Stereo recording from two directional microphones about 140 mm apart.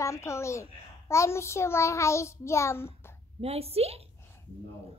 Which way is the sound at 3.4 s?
45° right (ahead or behind).